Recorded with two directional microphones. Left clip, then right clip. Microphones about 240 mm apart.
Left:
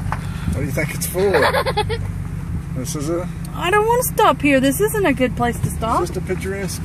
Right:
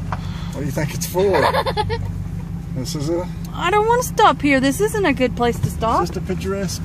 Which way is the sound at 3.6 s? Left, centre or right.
Centre.